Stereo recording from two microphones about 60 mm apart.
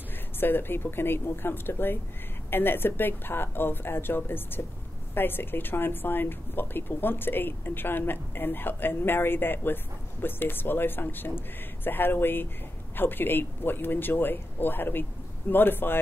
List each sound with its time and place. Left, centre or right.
0.4 s a woman's voice: left